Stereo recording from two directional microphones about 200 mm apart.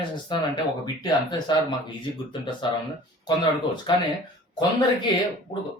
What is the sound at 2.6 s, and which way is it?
Speech, 25° left (ahead or behind).